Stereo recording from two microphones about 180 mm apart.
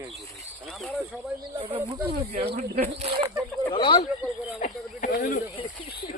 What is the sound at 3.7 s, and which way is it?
Speech, 25° left (ahead or behind).